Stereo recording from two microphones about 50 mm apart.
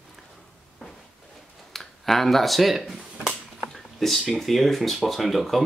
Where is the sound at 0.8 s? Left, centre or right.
Centre.